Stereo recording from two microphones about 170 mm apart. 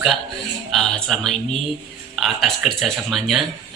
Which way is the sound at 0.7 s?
Centre (ahead or behind).